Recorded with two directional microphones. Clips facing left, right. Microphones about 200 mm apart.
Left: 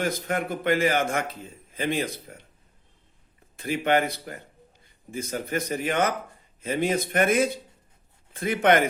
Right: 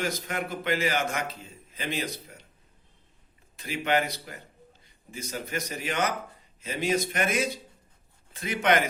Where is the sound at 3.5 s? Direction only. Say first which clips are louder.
Left 4 dB; 55° left (ahead or behind).